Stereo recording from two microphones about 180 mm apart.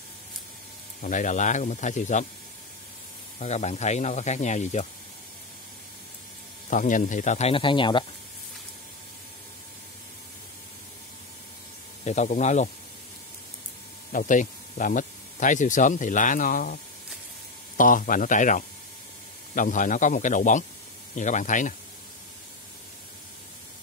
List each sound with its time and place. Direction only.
1.0 s speech: 45° left (ahead or behind)
3.3 s speech: 40° left (ahead or behind)
6.7 s speech: 45° left (ahead or behind); by 8.0 s 25° left (ahead or behind)
12.0 s speech: 40° left (ahead or behind)
14.1 s speech: 45° left (ahead or behind)